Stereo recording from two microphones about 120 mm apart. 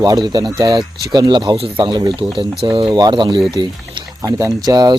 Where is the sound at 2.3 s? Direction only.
Centre (ahead or behind).